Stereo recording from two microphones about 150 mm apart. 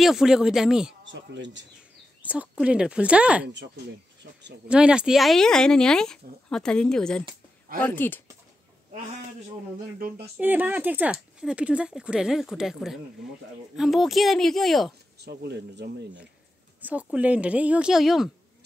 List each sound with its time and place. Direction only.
0.0 s speech: 5° right (ahead or behind)
2.2 s speech: 10° right (ahead or behind)
4.6 s speech: 5° right (ahead or behind); by 8.2 s 15° left (ahead or behind)
10.3 s speech: 10° right (ahead or behind)
15.1 s speech: 90° right
16.8 s speech: 10° right (ahead or behind)